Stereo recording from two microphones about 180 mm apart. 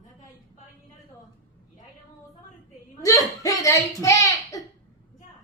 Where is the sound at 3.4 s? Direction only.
20° left (ahead or behind).